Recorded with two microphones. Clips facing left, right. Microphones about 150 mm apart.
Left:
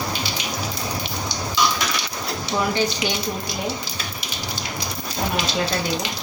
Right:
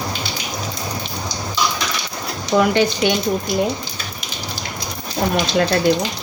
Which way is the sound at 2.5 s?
65° right (ahead or behind).